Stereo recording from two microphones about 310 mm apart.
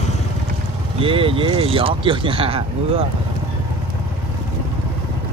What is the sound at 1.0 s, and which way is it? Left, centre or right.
Speech, centre.